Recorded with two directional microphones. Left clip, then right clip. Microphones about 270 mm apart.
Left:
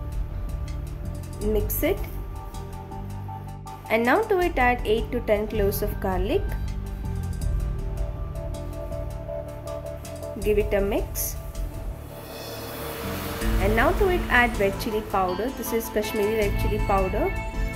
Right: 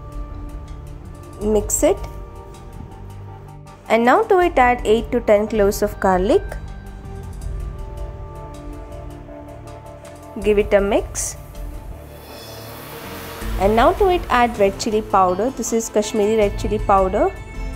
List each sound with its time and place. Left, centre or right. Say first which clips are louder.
1.4 s speech: right 8 dB; centre
3.8 s a woman's voice: right 7 dB; centre
10.4 s a woman's voice: right 7 dB; centre
13.6 s a woman's voice: right 8 dB; centre